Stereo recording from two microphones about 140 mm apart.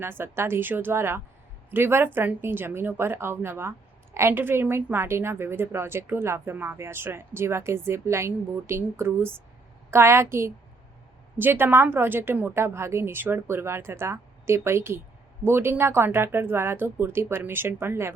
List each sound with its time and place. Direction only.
0.0 s a woman's voice: 15° right (ahead or behind)